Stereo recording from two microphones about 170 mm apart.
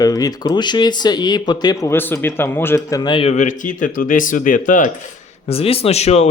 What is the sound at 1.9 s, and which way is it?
Speech, 15° left (ahead or behind).